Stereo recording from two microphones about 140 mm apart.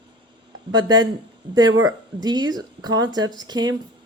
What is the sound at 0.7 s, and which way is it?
Speech, 30° right (ahead or behind).